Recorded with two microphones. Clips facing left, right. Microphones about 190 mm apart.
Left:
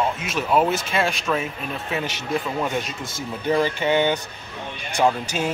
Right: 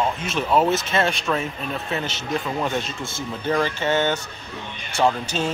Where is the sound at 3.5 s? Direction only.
15° left (ahead or behind).